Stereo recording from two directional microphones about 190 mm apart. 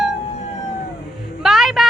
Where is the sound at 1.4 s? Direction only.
Centre (ahead or behind).